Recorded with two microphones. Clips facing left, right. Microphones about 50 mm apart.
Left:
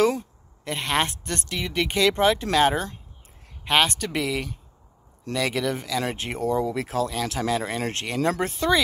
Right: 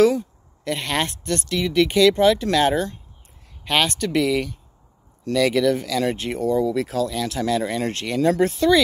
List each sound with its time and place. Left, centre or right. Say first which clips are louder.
0.7 s speech: right 1 dB; left
6.1 s speech: right 3 dB; left
8.4 s speech: right 7 dB; left